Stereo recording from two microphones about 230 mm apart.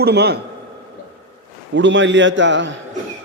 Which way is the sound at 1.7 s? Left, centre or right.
Right.